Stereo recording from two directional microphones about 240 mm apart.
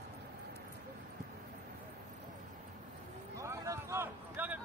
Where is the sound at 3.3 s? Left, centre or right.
Centre.